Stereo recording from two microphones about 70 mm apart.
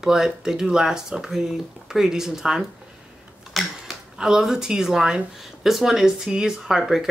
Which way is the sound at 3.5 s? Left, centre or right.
Centre.